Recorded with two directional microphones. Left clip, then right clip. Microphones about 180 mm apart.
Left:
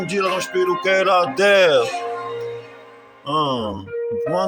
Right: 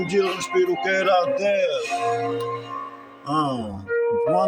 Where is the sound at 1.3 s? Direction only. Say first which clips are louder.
Left 7 dB; 65° left (ahead or behind).